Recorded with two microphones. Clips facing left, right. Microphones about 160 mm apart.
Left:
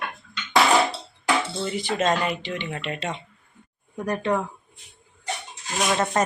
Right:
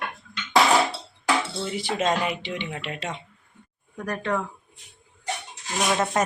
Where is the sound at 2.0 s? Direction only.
5° right (ahead or behind).